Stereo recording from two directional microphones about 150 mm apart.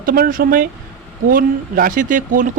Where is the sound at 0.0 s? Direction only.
65° right (ahead or behind).